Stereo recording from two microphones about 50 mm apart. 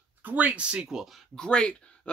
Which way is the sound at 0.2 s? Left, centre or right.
Right.